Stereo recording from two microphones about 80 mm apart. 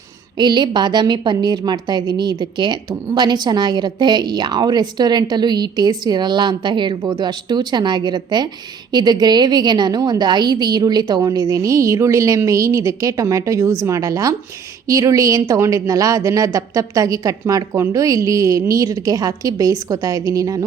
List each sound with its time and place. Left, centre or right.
0.3 s a woman's voice: right